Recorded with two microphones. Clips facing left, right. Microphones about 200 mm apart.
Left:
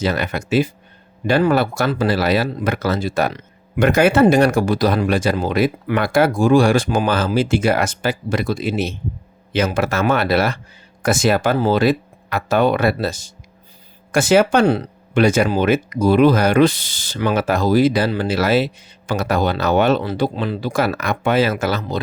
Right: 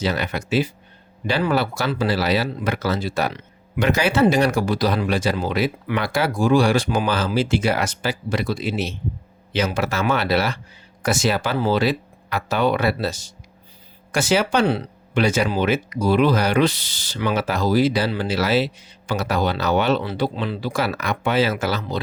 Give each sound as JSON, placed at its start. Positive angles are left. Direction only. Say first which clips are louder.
{"t": 0.0, "sound": "speech", "louder": "left 3 dB", "side_deg": 50}